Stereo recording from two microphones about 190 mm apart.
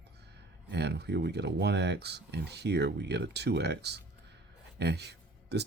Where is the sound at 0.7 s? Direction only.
60° right (ahead or behind).